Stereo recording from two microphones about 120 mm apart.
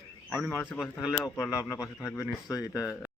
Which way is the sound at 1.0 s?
25° left (ahead or behind).